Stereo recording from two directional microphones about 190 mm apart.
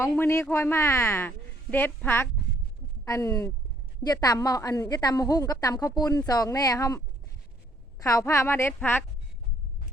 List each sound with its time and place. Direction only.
0.0 s a woman's voice: 15° left (ahead or behind)